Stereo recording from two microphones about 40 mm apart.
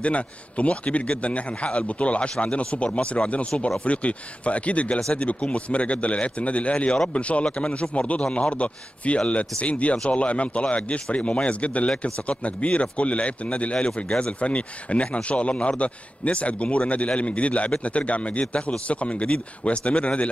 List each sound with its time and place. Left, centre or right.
0.0 s a man's voice: left